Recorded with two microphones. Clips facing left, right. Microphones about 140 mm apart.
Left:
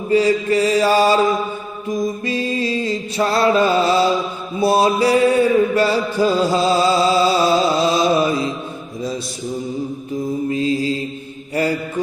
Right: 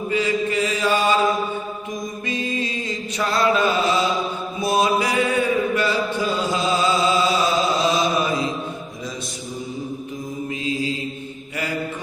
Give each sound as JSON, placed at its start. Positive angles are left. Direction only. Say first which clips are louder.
{"t": 0.1, "sound": "mantra", "louder": "left 7 dB", "side_deg": 35}
{"t": 2.2, "sound": "mantra", "louder": "left 5 dB", "side_deg": 35}
{"t": 10.5, "sound": "mantra", "louder": "left 4 dB", "side_deg": 35}